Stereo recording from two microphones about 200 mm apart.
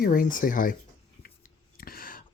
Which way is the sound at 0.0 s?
45° left (ahead or behind).